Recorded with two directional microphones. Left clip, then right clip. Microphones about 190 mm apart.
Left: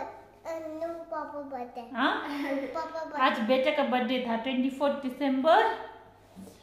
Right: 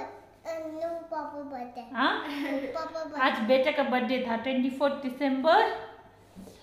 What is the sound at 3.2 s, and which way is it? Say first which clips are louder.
A woman's voice: right 1 dB; 15° right (ahead or behind).